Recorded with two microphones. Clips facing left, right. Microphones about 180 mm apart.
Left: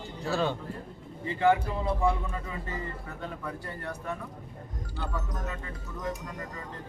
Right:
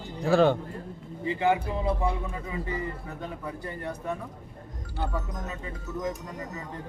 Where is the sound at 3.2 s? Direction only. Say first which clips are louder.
Right 1 dB; 20° right (ahead or behind).